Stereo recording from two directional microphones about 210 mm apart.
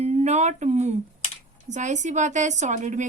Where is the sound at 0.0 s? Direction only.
30° right (ahead or behind).